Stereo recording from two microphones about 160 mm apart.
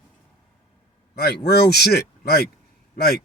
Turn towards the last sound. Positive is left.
turn(degrees=70)  # may be behind; listen again after turning